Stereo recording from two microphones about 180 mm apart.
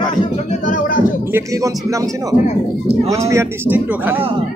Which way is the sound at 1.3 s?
15° right (ahead or behind).